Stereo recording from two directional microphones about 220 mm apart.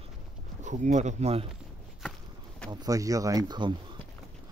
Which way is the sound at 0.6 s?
35° right (ahead or behind).